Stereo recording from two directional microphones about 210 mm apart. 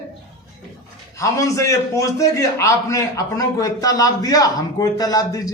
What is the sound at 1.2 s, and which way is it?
A man's voice, 15° left (ahead or behind).